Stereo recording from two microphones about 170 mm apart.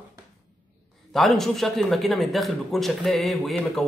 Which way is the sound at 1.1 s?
Centre (ahead or behind).